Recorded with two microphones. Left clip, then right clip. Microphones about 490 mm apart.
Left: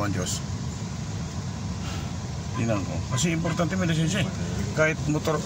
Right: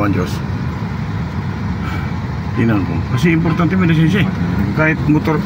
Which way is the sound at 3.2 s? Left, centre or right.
Left.